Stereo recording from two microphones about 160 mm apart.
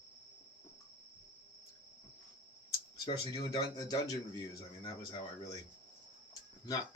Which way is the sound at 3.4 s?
25° left (ahead or behind).